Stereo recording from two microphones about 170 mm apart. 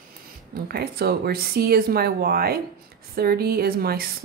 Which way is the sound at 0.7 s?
65° right (ahead or behind).